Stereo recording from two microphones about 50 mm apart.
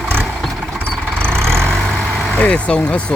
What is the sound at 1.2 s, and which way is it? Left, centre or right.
Vehicle, right.